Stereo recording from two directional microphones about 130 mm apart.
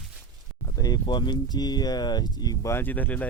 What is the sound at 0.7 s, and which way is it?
Speech, 30° left (ahead or behind).